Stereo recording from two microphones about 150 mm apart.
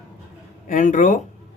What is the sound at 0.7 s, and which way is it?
Speech, 60° left (ahead or behind).